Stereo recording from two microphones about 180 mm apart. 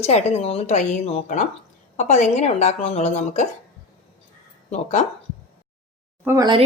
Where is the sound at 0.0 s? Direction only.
35° left (ahead or behind).